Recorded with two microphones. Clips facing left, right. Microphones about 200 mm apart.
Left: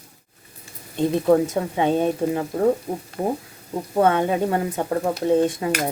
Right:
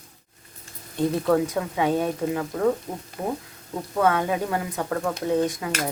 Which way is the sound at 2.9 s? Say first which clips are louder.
Left 6 dB; 5° left (ahead or behind).